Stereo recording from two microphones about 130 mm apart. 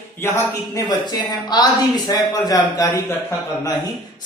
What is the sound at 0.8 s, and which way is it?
A man's voice, 35° left (ahead or behind).